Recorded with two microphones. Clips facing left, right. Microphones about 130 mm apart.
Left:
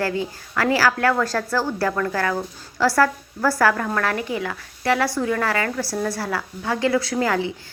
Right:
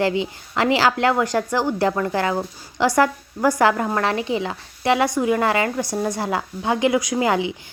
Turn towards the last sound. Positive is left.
turn(degrees=-15)  # may be behind; listen again after turning